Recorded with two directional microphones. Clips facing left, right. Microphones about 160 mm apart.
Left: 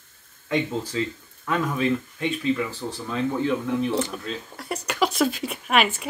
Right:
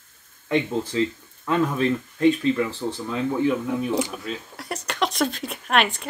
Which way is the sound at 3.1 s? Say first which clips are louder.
Right 1 dB; 15° right (ahead or behind).